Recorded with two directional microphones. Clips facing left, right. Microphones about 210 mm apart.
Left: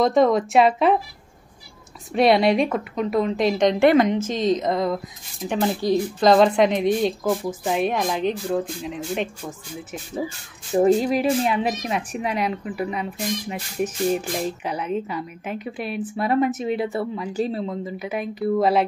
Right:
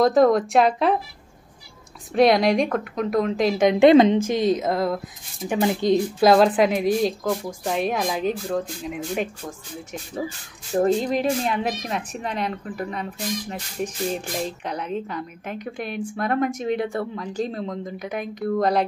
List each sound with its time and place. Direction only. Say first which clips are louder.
0.0 s speech: right 1 dB; centre (ahead or behind)
2.1 s speech: even; centre (ahead or behind)
3.8 s a woman's voice: right 5 dB; 25° right (ahead or behind)
4.3 s speech: even; 10° right (ahead or behind)
5.6 s a woman's voice: right 2 dB; 20° right (ahead or behind)
6.1 s speech: left 1 dB; 5° right (ahead or behind)